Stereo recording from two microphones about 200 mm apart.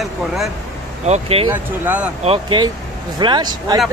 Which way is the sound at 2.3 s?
25° right (ahead or behind).